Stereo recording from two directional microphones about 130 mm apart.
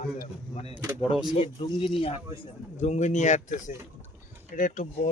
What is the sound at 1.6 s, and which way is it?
Speech, 40° left (ahead or behind).